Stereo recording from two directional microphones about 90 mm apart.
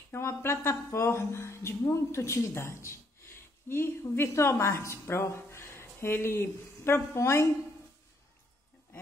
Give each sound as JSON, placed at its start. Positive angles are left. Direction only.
{"t": 0.1, "sound": "a woman's voice", "side_deg": 30}